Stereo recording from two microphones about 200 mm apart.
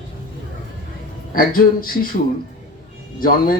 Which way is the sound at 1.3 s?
45° left (ahead or behind).